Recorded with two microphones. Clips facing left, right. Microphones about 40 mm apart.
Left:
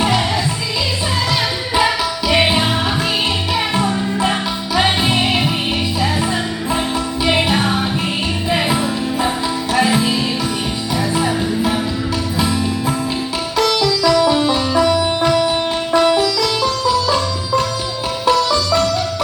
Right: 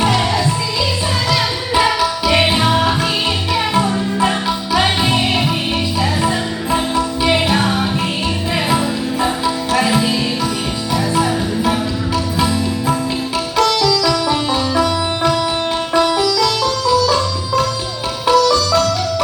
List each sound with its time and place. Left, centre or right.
2.2 s music: centre
13.6 s sitar: centre
14.1 s music: centre
16.0 s sitar: left
17.1 s sitar: centre
18.4 s music: centre